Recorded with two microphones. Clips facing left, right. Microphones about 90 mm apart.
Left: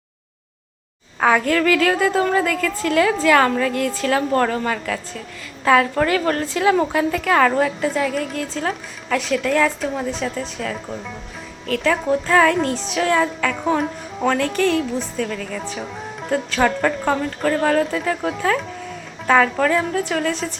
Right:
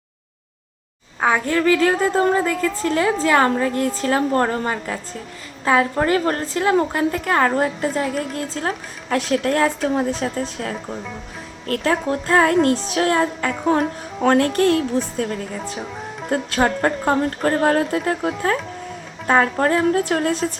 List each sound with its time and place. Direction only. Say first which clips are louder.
1.2 s a woman's voice: left 1 dB; 20° right (ahead or behind)
6.7 s a woman's voice: left 1 dB; centre (ahead or behind)
7.3 s speech: left 2 dB; 30° right (ahead or behind)
12.6 s speech: right 2 dB; 50° right (ahead or behind)
13.6 s a woman's voice: right 3 dB; 5° right (ahead or behind)
14.3 s speech: right 3 dB; 45° right (ahead or behind)
15.1 s speech: even; 35° right (ahead or behind)
19.3 s speech: left 1 dB; 35° right (ahead or behind)